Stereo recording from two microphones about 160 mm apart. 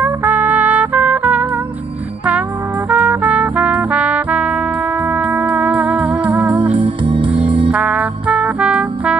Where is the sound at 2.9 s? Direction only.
10° right (ahead or behind).